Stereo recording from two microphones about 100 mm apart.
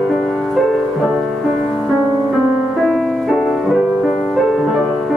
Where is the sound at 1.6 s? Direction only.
15° right (ahead or behind).